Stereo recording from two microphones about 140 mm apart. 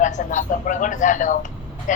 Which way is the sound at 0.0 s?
60° left (ahead or behind).